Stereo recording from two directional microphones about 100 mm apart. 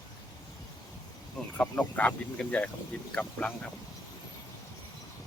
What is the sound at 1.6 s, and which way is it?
Speech, 15° left (ahead or behind).